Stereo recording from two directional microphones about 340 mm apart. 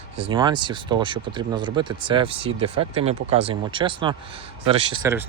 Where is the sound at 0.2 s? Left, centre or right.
Centre.